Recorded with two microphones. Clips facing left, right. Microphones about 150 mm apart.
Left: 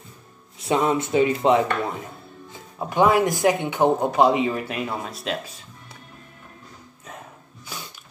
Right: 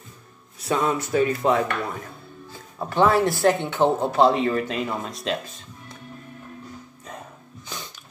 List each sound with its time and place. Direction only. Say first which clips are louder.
0.6 s rub: left 2 dB; 25° left (ahead or behind)
2.5 s speech: left 1 dB; 15° left (ahead or behind)
7.7 s music: even; 10° left (ahead or behind)